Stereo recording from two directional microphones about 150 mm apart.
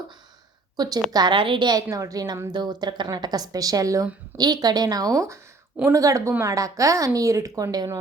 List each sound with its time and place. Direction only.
0.8 s a woman's voice: 25° right (ahead or behind)